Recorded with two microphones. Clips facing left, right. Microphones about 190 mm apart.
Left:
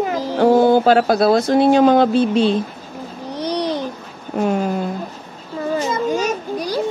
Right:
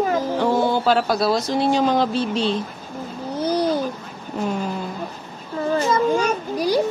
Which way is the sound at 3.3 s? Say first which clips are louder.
Right 1 dB; 5° right (ahead or behind).